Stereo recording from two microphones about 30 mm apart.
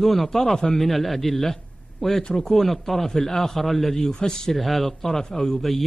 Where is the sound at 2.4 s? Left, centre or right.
Centre.